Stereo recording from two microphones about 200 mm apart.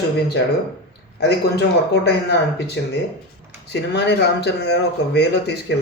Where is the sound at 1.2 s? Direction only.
55° left (ahead or behind).